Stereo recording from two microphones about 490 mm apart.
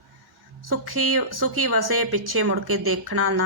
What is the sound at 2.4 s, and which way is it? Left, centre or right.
Speech, right.